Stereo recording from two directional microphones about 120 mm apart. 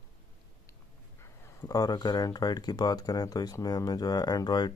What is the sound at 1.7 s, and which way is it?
Speech, 30° left (ahead or behind).